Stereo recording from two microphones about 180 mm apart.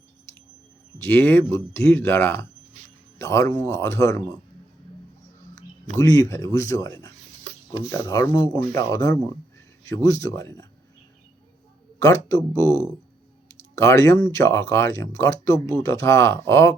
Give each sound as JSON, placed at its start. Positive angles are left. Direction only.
{"t": 1.0, "sound": "speech", "side_deg": 10}
{"t": 6.0, "sound": "speech", "side_deg": 15}
{"t": 11.9, "sound": "speech", "side_deg": 15}